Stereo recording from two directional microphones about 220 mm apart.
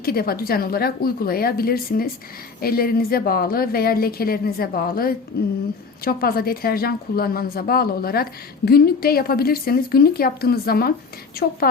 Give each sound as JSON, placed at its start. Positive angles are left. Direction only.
{"t": 0.0, "sound": "a woman's voice", "side_deg": 40}